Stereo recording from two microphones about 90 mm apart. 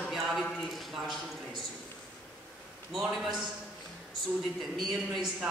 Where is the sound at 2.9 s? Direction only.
Centre (ahead or behind).